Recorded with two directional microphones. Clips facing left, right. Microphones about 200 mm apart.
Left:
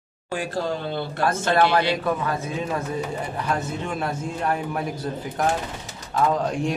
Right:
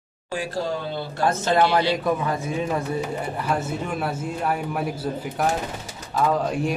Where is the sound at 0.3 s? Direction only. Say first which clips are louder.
Even; 55° left (ahead or behind).